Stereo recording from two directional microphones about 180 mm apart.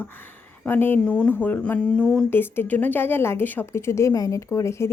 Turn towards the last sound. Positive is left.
turn(degrees=15)  # may be behind; listen again after turning